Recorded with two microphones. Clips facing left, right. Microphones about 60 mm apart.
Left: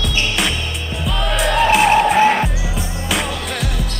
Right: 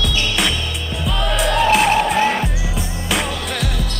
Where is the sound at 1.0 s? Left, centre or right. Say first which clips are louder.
Even; centre.